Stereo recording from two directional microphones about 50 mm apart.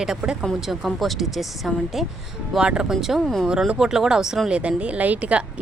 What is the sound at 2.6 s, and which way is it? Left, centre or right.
Speech, centre.